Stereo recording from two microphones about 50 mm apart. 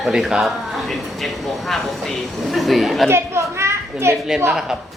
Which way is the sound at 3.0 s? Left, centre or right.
Right.